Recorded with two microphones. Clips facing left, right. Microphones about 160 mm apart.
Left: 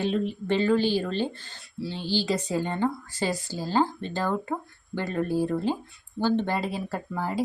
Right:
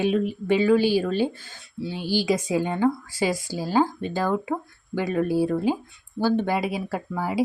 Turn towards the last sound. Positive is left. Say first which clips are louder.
# right 4 dB
turn(degrees=-10)  # may be behind; listen again after turning